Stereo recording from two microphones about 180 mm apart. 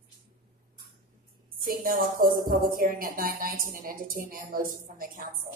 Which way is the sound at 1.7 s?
55° right (ahead or behind).